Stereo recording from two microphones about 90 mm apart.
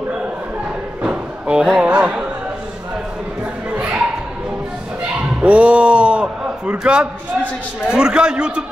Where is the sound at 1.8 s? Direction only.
15° right (ahead or behind).